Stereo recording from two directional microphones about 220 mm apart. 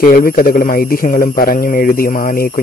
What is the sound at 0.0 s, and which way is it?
A man's voice, 40° left (ahead or behind).